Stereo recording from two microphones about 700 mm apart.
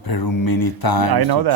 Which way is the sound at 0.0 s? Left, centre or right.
Left.